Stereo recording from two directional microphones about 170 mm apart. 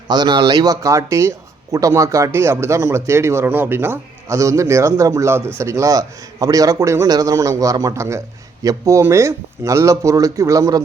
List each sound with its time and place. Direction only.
0.1 s a man's voice: 25° right (ahead or behind)